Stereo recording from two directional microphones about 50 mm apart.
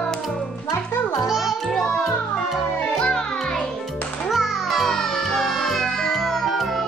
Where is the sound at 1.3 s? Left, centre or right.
Centre.